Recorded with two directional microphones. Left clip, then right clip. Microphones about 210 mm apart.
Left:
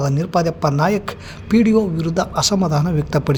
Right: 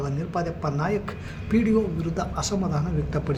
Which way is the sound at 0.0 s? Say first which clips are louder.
Left 10 dB; 55° left (ahead or behind).